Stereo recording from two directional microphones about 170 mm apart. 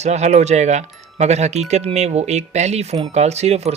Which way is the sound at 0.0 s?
40° right (ahead or behind).